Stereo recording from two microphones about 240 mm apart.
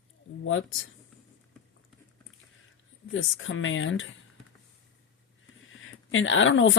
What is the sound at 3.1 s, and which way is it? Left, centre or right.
Speech, left.